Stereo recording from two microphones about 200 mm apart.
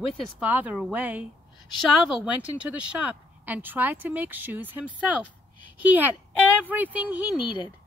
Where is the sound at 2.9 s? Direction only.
10° right (ahead or behind).